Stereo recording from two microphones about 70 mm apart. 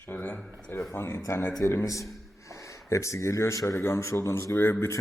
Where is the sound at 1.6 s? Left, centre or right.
Left.